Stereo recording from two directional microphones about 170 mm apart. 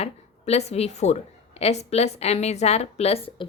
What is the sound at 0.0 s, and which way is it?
A woman's voice, 40° left (ahead or behind).